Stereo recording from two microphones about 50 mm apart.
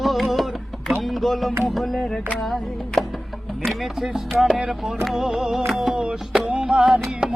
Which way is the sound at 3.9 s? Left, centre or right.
Centre.